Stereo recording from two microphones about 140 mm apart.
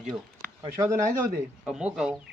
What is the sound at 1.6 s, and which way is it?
Speech, 5° right (ahead or behind).